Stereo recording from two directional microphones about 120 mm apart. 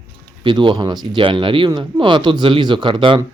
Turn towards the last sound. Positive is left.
turn(degrees=-45)  # may be behind; listen again after turning